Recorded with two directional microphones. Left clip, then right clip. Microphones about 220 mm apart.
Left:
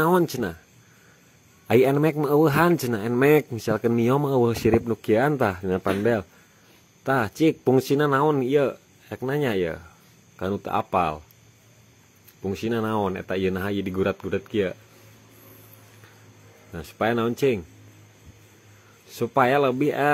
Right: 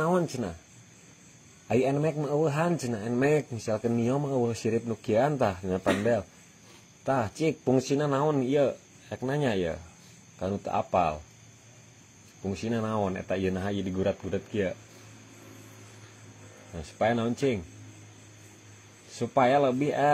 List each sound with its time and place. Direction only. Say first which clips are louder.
0.0 s speech: left 6 dB; 40° left (ahead or behind)
1.7 s speech: left 7 dB; 35° left (ahead or behind)
12.4 s speech: left 5 dB; 35° left (ahead or behind)
16.7 s speech: left 3 dB; 35° left (ahead or behind)
19.0 s speech: left 3 dB; 35° left (ahead or behind)